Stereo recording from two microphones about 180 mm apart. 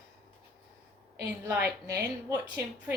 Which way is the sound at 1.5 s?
10° right (ahead or behind).